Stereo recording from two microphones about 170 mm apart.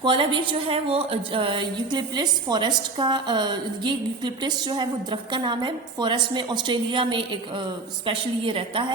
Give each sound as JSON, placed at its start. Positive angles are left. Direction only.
{"t": 0.0, "sound": "a woman's voice", "side_deg": -30}